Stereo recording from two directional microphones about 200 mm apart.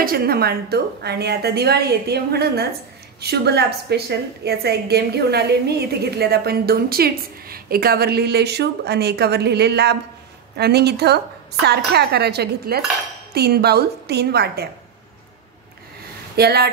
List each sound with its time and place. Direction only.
0.0 s a woman's voice: 50° right (ahead or behind)
16.3 s a woman's voice: 55° right (ahead or behind)